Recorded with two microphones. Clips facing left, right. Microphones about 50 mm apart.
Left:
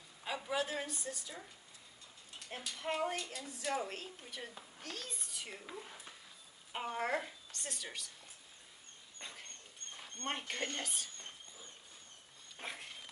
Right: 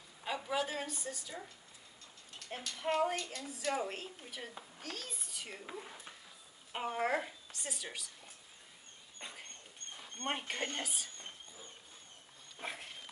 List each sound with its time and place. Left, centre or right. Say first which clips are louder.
0.2 s a woman's voice: right 1 dB; centre
2.5 s a woman's voice: right 4 dB; centre
9.2 s dog: right 1 dB; centre
10.0 s speech: right 2 dB; centre
10.8 s a woman's voice: right 1 dB; centre
12.6 s sniff: right 2 dB; centre